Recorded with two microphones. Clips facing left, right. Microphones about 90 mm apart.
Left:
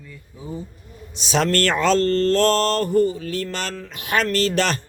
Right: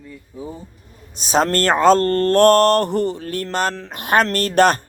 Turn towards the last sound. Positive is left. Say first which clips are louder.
# right 5 dB
turn(degrees=-50)  # may be behind; listen again after turning